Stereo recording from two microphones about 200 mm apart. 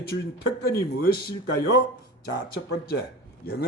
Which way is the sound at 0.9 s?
50° left (ahead or behind).